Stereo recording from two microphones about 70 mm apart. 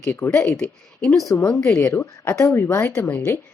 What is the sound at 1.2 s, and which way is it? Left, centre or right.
Speech, left.